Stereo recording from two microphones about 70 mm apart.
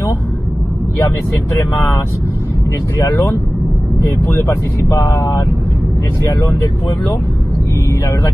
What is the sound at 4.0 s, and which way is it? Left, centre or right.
Speech, left.